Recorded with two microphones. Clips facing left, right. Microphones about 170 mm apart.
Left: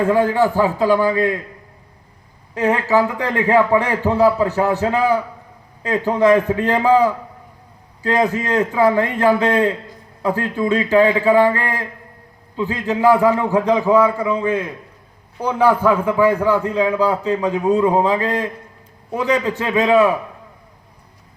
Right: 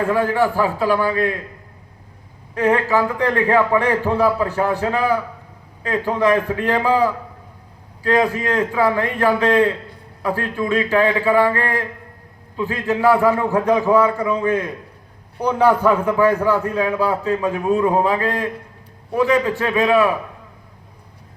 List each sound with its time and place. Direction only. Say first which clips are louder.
0.1 s a man's voice: left 2 dB; 20° left (ahead or behind)
2.6 s a man's voice: left 1 dB; 20° left (ahead or behind)